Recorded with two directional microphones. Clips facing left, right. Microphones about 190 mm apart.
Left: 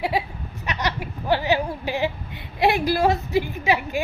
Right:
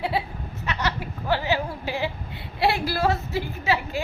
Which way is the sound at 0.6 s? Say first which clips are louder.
Left 1 dB; 15° left (ahead or behind).